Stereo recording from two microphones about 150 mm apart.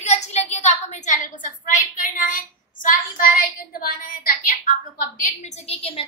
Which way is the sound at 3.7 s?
75° left (ahead or behind).